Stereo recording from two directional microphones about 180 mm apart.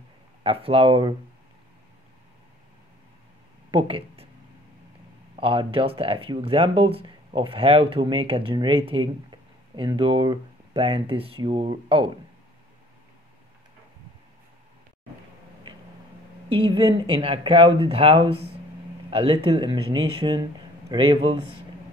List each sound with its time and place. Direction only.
0.4 s speech: 30° right (ahead or behind)
3.7 s speech: 30° right (ahead or behind)
5.3 s speech: 30° right (ahead or behind)
16.4 s speech: 30° right (ahead or behind)